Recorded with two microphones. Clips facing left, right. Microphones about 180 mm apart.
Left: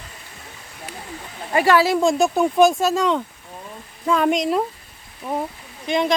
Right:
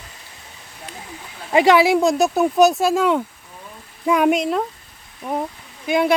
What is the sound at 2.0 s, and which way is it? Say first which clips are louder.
Speech: right 1 dB; centre (ahead or behind).